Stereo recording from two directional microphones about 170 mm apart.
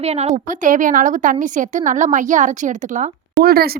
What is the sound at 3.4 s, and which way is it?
Speech, 65° right (ahead or behind).